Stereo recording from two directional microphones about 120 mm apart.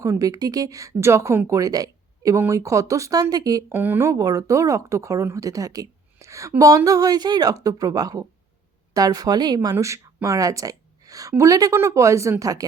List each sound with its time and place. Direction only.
0.0 s a woman's voice: 30° right (ahead or behind)
3.7 s a woman's voice: 15° right (ahead or behind); by 9.7 s 35° right (ahead or behind)
9.7 s a woman's voice: 20° right (ahead or behind)